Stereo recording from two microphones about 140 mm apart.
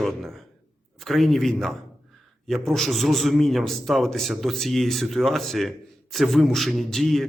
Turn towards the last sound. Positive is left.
turn(degrees=0)  # may be behind; listen again after turning